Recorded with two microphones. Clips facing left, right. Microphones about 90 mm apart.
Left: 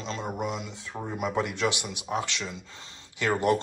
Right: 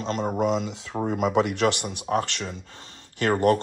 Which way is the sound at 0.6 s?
75° right (ahead or behind).